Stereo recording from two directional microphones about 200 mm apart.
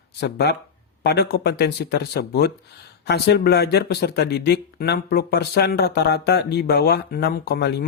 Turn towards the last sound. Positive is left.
turn(degrees=55)  # may be behind; listen again after turning